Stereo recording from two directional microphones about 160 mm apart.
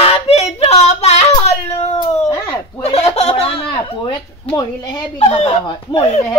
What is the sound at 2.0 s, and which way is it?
Cat, 20° left (ahead or behind).